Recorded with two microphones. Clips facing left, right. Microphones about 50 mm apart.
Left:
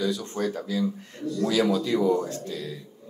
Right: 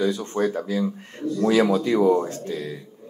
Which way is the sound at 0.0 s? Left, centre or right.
Right.